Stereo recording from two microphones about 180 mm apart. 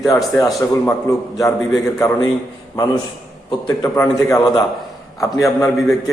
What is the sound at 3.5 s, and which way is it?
A man's voice, 20° left (ahead or behind).